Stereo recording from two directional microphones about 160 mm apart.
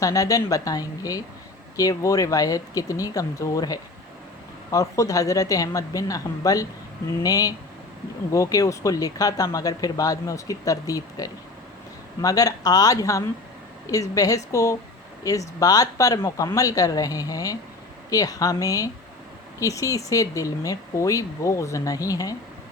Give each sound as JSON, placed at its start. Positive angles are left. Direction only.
{"t": 0.0, "sound": "speech", "side_deg": 20}